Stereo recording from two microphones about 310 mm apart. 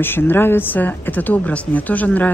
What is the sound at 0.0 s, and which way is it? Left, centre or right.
Speech, centre.